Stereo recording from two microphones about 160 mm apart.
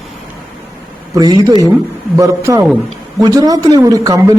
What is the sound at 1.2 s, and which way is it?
A man's voice, 25° right (ahead or behind).